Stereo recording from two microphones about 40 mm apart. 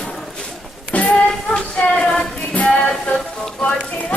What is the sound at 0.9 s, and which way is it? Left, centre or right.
Music, left.